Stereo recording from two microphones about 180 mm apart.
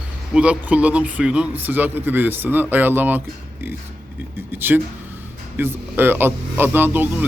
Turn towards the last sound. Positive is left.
turn(degrees=-10)  # may be behind; listen again after turning